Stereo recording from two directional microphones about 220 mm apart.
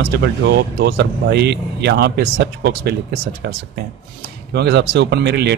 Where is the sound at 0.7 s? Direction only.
50° right (ahead or behind).